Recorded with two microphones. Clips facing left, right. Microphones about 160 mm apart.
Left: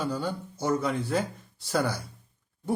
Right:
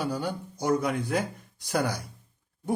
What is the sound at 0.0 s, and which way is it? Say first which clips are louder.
Speech: even; 15° right (ahead or behind).